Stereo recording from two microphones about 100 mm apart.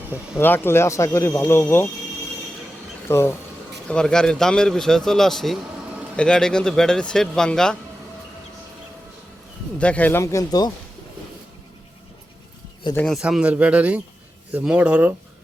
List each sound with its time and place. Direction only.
0.3 s speech: 20° left (ahead or behind)
3.1 s speech: 25° left (ahead or behind)
3.8 s speech: 10° left (ahead or behind)
9.7 s speech: 15° left (ahead or behind)
13.2 s speech: 10° right (ahead or behind)